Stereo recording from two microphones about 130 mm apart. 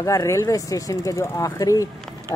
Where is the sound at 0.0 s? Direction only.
25° left (ahead or behind).